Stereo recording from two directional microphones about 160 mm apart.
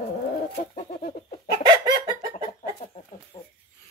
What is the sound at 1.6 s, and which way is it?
Chicken, 25° right (ahead or behind).